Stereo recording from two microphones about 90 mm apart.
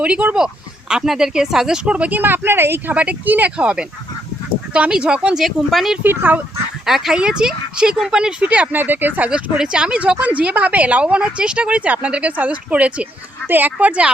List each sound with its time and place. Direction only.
0.0 s a woman's voice: 15° right (ahead or behind)
6.0 s speech: 20° right (ahead or behind)
6.8 s a woman's voice: 5° right (ahead or behind)